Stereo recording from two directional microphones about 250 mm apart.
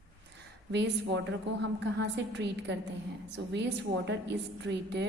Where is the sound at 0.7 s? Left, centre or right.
Right.